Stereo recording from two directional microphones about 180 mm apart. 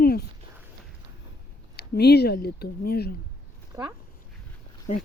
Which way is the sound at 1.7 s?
65° left (ahead or behind).